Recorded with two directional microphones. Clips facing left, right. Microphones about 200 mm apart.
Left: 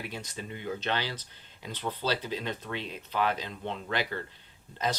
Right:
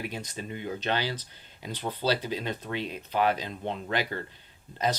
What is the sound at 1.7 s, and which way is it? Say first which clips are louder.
Speech: right 3 dB; 15° right (ahead or behind).